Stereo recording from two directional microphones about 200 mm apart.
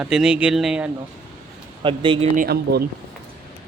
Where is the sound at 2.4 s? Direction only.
50° right (ahead or behind).